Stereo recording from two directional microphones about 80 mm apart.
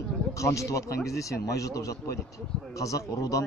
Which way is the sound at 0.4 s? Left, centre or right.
Left.